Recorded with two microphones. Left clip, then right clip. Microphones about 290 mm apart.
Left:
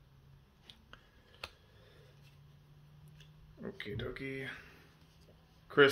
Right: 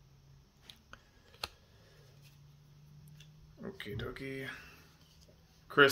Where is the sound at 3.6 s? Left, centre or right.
Centre.